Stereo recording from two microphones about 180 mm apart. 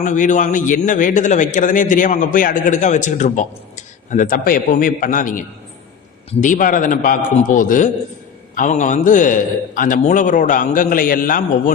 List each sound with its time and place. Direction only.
0.0 s a man's voice: 45° left (ahead or behind)
6.4 s a man's voice: 45° left (ahead or behind)